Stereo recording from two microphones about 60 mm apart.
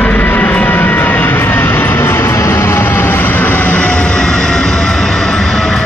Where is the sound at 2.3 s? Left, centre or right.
Left.